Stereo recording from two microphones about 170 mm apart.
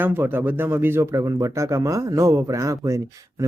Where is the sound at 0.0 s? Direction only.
10° right (ahead or behind).